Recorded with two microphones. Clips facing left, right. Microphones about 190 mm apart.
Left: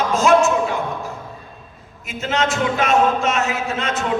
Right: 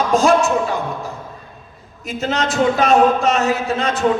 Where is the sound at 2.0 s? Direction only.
35° right (ahead or behind).